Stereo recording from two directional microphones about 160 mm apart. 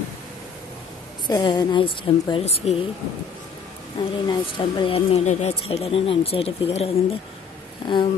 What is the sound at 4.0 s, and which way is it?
Speech, 30° left (ahead or behind).